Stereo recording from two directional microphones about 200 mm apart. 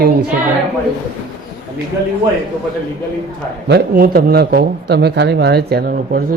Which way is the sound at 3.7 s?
50° right (ahead or behind).